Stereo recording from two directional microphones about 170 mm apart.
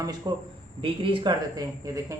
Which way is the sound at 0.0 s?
25° right (ahead or behind).